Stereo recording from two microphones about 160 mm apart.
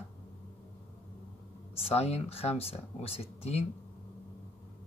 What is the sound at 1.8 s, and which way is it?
Speech, 40° left (ahead or behind).